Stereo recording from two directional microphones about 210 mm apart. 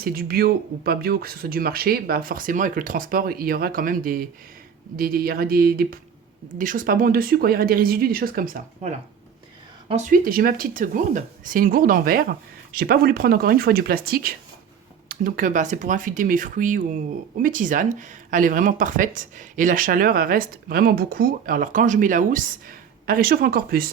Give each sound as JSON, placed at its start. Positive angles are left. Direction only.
{"t": 0.0, "sound": "speech", "side_deg": -45}